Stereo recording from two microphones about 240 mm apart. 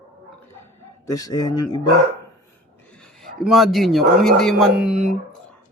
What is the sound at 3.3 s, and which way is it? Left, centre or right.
Speech, centre.